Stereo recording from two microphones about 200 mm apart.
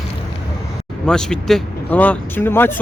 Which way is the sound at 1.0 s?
5° left (ahead or behind).